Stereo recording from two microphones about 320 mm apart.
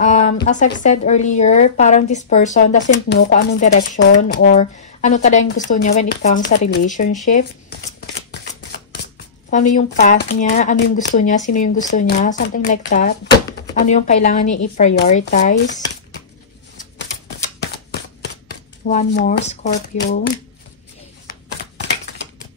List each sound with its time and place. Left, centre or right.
0.0 s a woman's voice: left
8.3 s shuffling cards: left
9.5 s a woman's voice: left
18.9 s a woman's voice: left